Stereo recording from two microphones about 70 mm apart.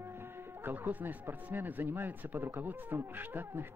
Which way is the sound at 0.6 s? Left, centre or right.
Right.